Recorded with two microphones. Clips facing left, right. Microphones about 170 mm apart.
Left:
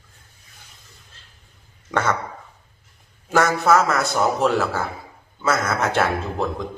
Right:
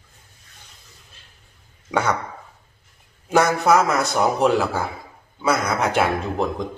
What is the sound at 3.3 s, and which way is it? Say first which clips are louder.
A man's voice: right 1 dB; 15° right (ahead or behind).